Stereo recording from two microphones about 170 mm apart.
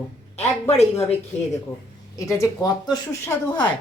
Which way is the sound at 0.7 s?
40° left (ahead or behind).